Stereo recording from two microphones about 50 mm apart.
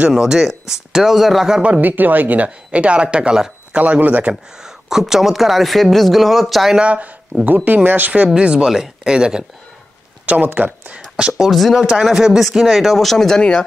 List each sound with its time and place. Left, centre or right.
0.1 s speech: centre
1.8 s speech: right; by 3.5 s centre
3.7 s speech: right
4.6 s speech: centre
6.8 s speech: right
7.4 s speech: right
8.4 s speech: right
8.6 s speech: centre
10.2 s speech: right
11.1 s speech: centre
11.4 s speech: centre